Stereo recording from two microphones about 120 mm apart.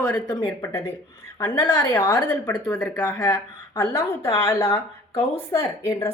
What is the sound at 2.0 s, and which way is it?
A woman's voice, 35° left (ahead or behind).